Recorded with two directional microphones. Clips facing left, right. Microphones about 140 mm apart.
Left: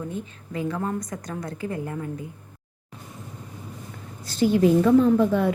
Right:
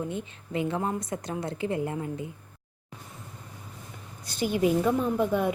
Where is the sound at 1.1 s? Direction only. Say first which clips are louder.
Right 1 dB; 25° right (ahead or behind).